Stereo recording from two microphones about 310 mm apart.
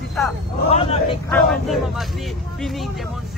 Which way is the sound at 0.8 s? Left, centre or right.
Centre.